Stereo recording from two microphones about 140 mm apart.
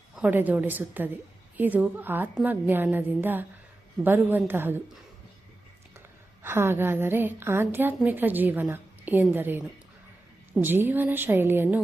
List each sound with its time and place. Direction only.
0.2 s a woman's voice: 15° right (ahead or behind)
6.4 s a woman's voice: 15° right (ahead or behind)